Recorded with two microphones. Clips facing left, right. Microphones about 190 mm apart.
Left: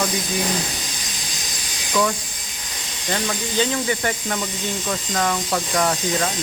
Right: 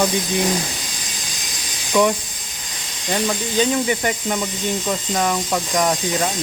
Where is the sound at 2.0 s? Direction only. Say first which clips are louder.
Right 4 dB; 15° right (ahead or behind).